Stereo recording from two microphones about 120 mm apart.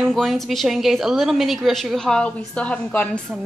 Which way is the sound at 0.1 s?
Centre (ahead or behind).